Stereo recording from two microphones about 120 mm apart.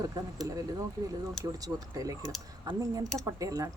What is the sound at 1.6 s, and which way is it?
Speech, 30° right (ahead or behind).